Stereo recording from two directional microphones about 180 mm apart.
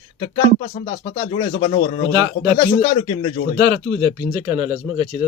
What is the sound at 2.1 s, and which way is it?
Speech, 25° right (ahead or behind).